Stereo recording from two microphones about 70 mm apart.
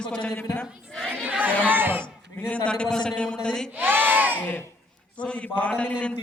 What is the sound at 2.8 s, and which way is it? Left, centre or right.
Speech, centre.